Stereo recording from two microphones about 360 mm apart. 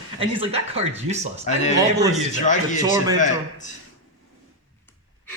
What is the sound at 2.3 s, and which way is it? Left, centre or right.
Speech, centre.